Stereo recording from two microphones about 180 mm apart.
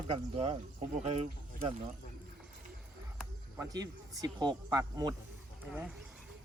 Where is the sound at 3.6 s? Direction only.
20° right (ahead or behind).